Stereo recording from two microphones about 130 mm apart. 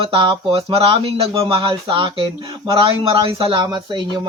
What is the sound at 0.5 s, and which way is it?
Speech, 50° right (ahead or behind).